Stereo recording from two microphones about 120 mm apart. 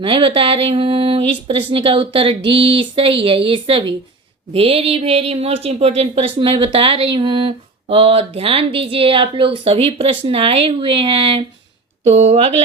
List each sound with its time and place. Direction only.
0.0 s speech: 45° right (ahead or behind)
4.5 s speech: 55° right (ahead or behind)
12.0 s speech: 70° right (ahead or behind)